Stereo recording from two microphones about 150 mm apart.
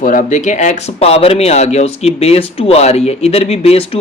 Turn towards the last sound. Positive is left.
turn(degrees=40)  # may be behind; listen again after turning